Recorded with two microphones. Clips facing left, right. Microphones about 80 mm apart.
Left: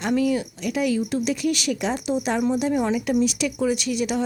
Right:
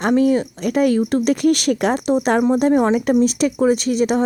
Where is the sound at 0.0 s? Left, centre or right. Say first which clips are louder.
Right 6 dB; right.